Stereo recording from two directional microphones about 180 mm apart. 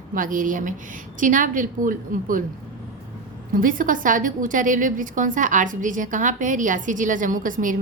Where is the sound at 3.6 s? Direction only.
50° right (ahead or behind).